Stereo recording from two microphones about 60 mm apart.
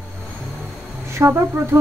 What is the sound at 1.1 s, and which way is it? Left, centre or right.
Speech, right.